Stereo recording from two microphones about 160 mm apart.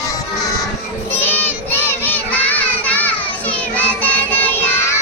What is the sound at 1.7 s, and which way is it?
Children playing, 10° left (ahead or behind).